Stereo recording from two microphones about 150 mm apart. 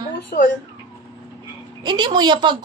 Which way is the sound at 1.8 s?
30° right (ahead or behind).